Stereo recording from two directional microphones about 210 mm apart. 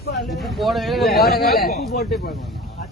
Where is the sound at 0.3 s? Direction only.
Centre (ahead or behind).